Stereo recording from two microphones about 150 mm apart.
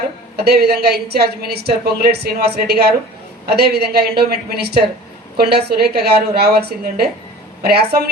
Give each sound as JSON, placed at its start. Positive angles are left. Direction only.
{"t": 0.4, "sound": "a woman's voice", "side_deg": -90}